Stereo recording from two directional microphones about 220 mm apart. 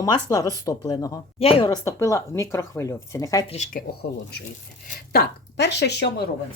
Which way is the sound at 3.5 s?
30° left (ahead or behind).